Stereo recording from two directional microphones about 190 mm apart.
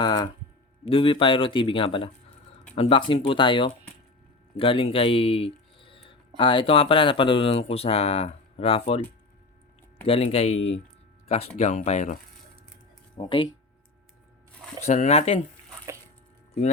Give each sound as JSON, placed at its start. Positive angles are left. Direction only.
{"t": 0.0, "sound": "speech", "side_deg": 20}
{"t": 10.1, "sound": "speech", "side_deg": 30}
{"t": 13.1, "sound": "speech", "side_deg": 25}
{"t": 14.8, "sound": "speech", "side_deg": 35}